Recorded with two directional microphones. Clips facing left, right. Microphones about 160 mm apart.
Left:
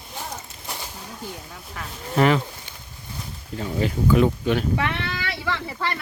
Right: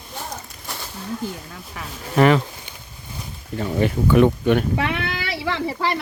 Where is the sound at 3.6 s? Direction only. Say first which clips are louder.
Right 4 dB; 65° right (ahead or behind).